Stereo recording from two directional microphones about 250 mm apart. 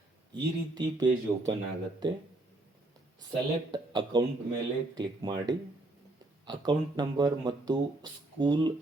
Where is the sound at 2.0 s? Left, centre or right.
Centre.